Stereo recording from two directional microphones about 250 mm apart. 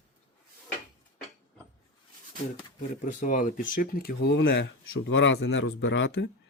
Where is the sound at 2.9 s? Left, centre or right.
Left.